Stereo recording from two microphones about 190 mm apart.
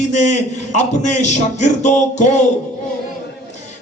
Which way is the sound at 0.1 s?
40° left (ahead or behind).